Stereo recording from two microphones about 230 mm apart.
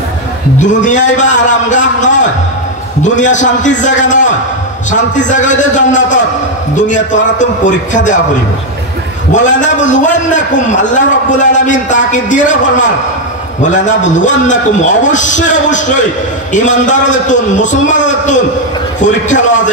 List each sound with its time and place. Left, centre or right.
1.1 s a man's voice: left
9.3 s a man's voice: left